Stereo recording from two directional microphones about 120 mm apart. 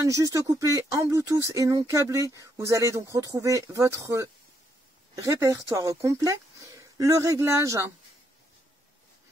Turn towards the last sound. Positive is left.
turn(degrees=-25)  # may be behind; listen again after turning